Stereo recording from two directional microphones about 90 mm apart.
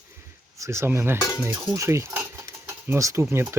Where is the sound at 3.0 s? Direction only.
35° right (ahead or behind).